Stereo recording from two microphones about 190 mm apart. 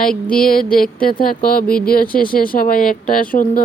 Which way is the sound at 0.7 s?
50° left (ahead or behind).